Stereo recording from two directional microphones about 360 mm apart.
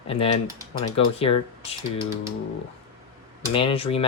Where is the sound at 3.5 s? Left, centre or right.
Centre.